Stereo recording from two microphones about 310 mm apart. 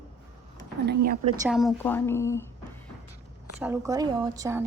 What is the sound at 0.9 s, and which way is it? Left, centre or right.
Speech, right.